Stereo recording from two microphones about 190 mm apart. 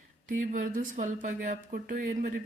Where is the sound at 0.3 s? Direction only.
45° right (ahead or behind).